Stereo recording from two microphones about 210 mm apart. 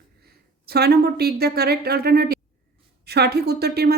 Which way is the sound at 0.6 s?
50° right (ahead or behind).